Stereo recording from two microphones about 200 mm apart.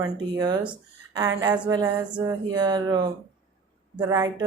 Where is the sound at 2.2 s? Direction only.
20° right (ahead or behind).